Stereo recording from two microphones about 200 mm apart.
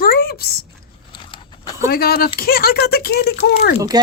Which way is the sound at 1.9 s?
50° left (ahead or behind).